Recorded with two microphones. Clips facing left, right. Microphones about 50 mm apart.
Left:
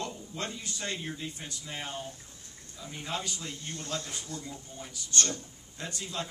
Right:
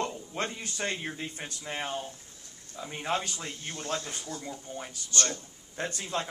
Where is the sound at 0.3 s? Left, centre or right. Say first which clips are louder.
Right 3 dB; right.